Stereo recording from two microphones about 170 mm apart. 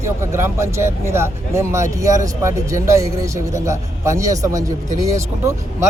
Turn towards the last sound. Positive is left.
turn(degrees=-20)  # may be behind; listen again after turning